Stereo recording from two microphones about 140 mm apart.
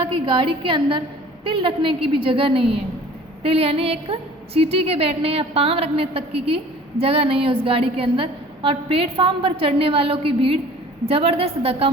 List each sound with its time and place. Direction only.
0.3 s a woman's voice: 35° right (ahead or behind)